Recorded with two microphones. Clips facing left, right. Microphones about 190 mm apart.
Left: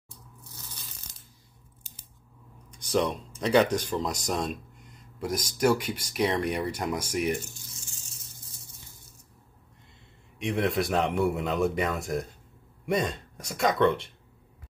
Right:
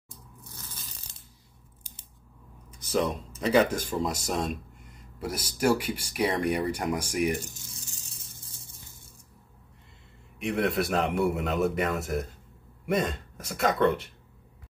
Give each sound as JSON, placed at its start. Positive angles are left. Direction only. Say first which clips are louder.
{"t": 0.4, "sound": "tearing", "louder": "right 2 dB", "side_deg": -50}
{"t": 2.7, "sound": "a man's voice", "louder": "left 1 dB", "side_deg": -5}
{"t": 7.7, "sound": "a sound", "louder": "right 2 dB", "side_deg": -35}
{"t": 10.4, "sound": "a man's voice", "louder": "even", "side_deg": 0}